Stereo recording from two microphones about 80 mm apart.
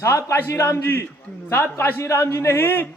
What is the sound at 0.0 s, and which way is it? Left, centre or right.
A man's voice, left.